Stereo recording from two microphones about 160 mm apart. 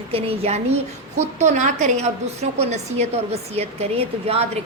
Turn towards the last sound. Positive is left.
turn(degrees=-40)  # may be behind; listen again after turning